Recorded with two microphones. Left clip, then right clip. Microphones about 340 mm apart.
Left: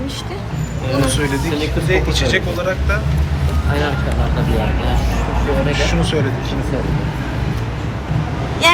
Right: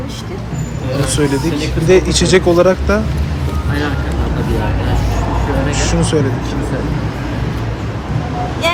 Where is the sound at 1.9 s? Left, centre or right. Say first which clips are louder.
Right 7 dB; centre.